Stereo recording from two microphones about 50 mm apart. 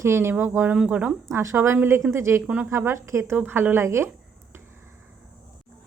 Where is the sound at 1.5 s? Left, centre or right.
Right.